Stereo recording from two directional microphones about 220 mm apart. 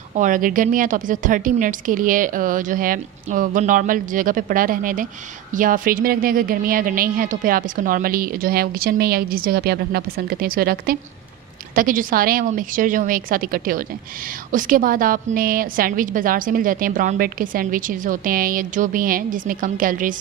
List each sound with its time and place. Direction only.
0.1 s a woman's voice: 35° right (ahead or behind)